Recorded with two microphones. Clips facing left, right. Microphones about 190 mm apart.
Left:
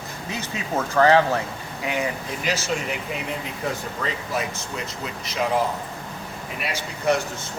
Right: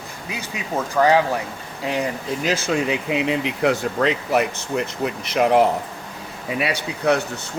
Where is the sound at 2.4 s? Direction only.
50° right (ahead or behind).